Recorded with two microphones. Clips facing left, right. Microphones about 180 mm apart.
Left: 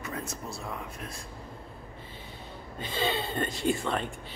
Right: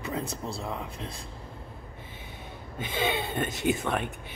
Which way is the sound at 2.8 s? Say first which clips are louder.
Right 1 dB; 20° right (ahead or behind).